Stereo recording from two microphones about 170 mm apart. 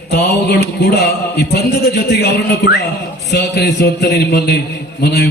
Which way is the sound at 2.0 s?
70° left (ahead or behind).